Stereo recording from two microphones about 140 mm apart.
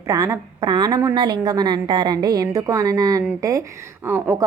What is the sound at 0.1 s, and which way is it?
A woman's voice, 25° right (ahead or behind).